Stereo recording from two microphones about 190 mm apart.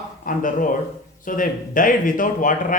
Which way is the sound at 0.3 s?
45° left (ahead or behind).